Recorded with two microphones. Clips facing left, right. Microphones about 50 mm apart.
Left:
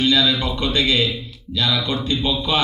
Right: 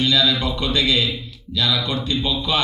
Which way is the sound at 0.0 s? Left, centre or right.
Left.